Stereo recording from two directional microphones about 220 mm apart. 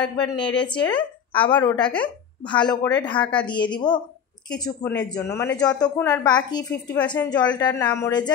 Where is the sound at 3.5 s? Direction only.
20° left (ahead or behind).